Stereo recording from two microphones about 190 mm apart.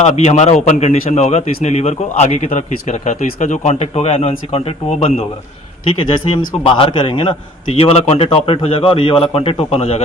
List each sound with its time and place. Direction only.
0.0 s a man's voice: 35° left (ahead or behind)